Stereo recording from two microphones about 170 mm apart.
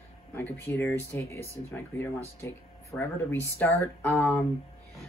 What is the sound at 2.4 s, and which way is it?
Speech, 15° left (ahead or behind).